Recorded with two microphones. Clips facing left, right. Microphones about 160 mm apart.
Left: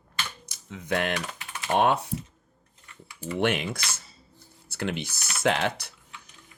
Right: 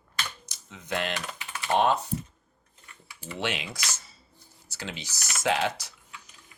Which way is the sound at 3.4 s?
55° left (ahead or behind).